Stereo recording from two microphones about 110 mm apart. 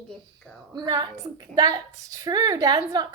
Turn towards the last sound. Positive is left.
turn(degrees=-35)  # may be behind; listen again after turning